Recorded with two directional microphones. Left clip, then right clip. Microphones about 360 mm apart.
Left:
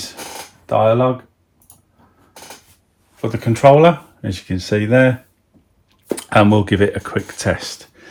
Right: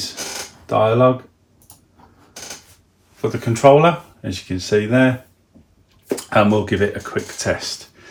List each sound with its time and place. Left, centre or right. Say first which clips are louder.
0.7 s speech: even; centre
3.2 s speech: left 1 dB; left
6.1 s speech: left 2 dB; left